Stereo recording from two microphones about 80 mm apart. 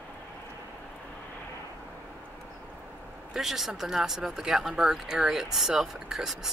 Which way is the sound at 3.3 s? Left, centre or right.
Centre.